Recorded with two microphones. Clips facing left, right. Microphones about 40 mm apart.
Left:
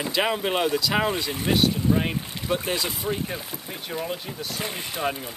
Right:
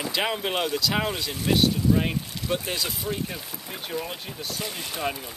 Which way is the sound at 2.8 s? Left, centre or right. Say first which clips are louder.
Left 2 dB; left.